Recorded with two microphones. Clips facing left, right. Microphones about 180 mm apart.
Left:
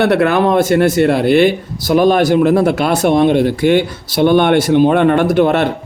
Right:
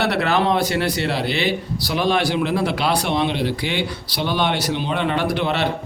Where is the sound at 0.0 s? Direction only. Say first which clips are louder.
Left 8 dB; 50° left (ahead or behind).